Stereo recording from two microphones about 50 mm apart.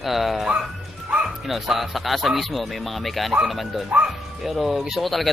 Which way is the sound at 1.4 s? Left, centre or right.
Centre.